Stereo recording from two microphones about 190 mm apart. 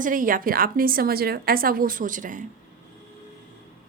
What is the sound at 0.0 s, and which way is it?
A woman's voice, 45° right (ahead or behind).